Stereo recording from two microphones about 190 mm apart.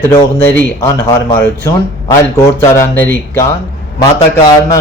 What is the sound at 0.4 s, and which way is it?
A man's voice, 10° left (ahead or behind).